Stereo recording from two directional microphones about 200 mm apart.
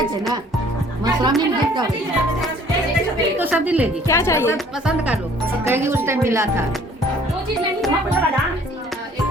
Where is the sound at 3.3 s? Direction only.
10° right (ahead or behind).